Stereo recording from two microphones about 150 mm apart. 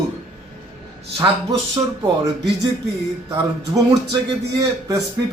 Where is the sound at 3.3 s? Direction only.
25° right (ahead or behind).